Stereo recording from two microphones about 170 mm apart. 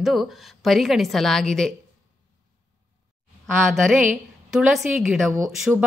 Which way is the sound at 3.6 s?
Centre (ahead or behind).